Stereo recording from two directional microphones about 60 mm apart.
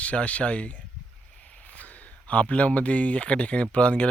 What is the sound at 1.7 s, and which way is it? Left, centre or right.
Speech, left.